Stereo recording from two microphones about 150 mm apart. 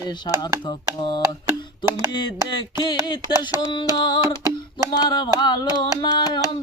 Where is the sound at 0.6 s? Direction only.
35° left (ahead or behind).